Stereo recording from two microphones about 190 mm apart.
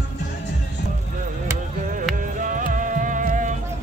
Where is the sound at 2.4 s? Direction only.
45° right (ahead or behind).